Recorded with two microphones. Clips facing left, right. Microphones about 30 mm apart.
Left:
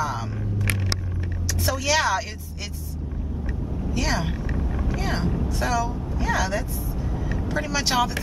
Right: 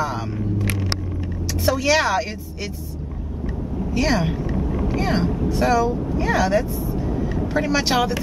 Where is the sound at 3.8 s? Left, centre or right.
Centre.